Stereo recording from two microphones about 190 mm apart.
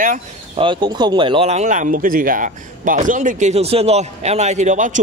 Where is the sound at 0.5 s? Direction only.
25° right (ahead or behind).